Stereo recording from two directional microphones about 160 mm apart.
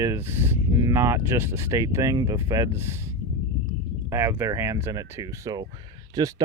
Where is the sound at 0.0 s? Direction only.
15° right (ahead or behind).